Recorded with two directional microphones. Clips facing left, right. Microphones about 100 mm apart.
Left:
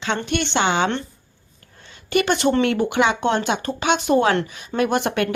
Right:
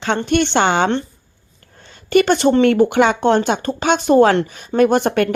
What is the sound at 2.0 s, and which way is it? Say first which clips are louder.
Speech: right 5 dB; 40° right (ahead or behind).